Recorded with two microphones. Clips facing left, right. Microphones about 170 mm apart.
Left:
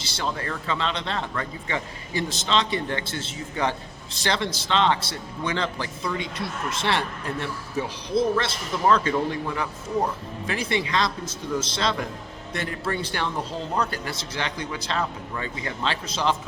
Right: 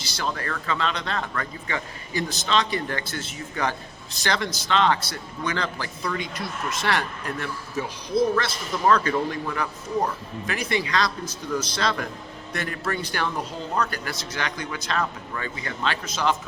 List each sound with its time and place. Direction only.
0.0 s speech: 25° left (ahead or behind)